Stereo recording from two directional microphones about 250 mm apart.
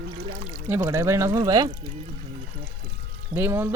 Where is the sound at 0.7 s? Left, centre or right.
Centre.